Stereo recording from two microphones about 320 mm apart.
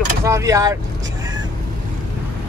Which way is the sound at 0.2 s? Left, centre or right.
Centre.